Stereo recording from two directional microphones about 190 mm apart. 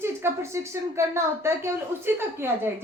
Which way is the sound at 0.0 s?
15° right (ahead or behind).